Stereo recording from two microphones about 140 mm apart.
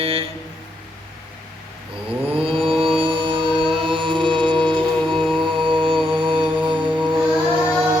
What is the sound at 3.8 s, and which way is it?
Chant, 35° right (ahead or behind).